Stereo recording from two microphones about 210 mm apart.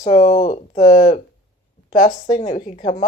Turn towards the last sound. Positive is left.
turn(degrees=35)  # may be behind; listen again after turning